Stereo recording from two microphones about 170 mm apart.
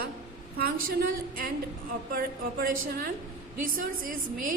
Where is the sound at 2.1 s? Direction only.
60° right (ahead or behind).